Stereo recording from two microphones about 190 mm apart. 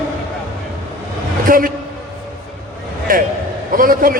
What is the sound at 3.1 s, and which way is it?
A man's voice, 50° right (ahead or behind).